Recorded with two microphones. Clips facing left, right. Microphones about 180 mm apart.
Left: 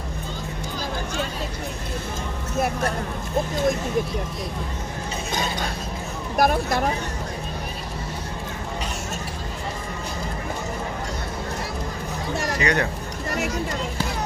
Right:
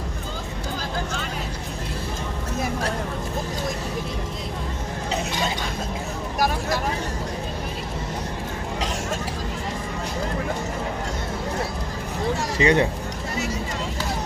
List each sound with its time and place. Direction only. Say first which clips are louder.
6.3 s speech: left 4 dB; 55° left (ahead or behind)
12.5 s speech: right 5 dB; 25° right (ahead or behind)